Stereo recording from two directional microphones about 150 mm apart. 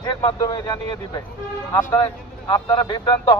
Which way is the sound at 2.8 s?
30° left (ahead or behind).